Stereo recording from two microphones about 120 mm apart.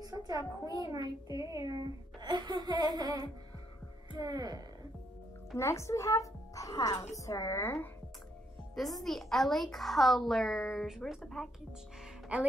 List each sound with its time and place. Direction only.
0.0 s a sound: 35° right (ahead or behind)
0.4 s a child's voice: 35° left (ahead or behind)
0.9 s a child's voice: 30° right (ahead or behind)
5.6 s a child's voice: 25° left (ahead or behind)
8.7 s a woman's voice: centre (ahead or behind)
12.0 s music: 10° right (ahead or behind)